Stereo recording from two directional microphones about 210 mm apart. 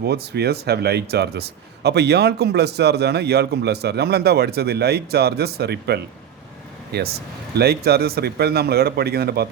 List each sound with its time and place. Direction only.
0.0 s a man's voice: 50° right (ahead or behind)